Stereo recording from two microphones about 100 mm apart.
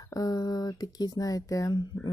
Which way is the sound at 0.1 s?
40° left (ahead or behind).